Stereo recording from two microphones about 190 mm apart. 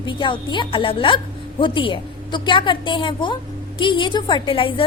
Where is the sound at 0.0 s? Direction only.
25° left (ahead or behind).